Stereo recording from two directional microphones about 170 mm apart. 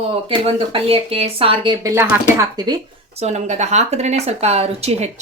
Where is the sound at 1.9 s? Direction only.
15° right (ahead or behind).